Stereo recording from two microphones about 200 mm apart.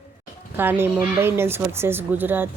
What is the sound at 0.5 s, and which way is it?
Speech, 10° right (ahead or behind).